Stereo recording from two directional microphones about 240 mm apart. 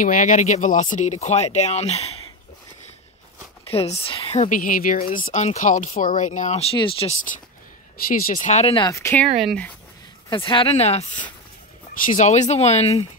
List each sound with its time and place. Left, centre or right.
0.0 s speech: left
3.6 s speech: left; by 9.7 s centre
10.3 s speech: left